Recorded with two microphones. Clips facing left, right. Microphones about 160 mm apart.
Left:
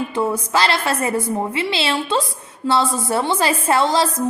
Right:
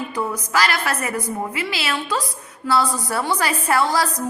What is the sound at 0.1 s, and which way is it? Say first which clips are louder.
A woman's voice: left 4 dB; 30° left (ahead or behind).